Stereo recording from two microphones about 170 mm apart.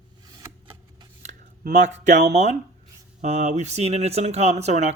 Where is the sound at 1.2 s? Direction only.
45° right (ahead or behind).